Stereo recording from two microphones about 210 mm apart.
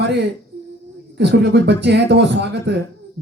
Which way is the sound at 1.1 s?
55° right (ahead or behind).